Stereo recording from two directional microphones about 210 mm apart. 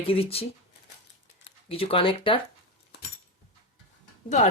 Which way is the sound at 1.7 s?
25° left (ahead or behind).